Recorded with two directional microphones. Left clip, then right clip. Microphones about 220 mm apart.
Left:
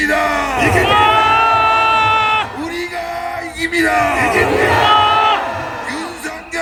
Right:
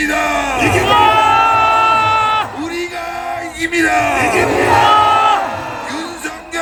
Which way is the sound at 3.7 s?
10° right (ahead or behind).